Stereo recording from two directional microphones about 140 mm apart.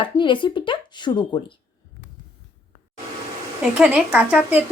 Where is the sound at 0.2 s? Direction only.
35° left (ahead or behind).